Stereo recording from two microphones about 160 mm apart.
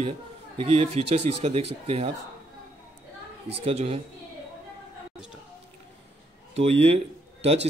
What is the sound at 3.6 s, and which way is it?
Speech, 40° right (ahead or behind).